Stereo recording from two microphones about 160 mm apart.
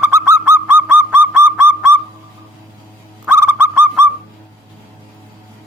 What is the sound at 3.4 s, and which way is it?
Bird, 15° right (ahead or behind).